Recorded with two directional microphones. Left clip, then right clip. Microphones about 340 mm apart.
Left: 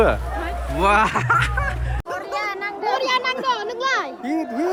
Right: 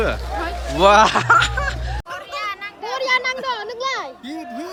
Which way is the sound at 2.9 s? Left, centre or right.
Left.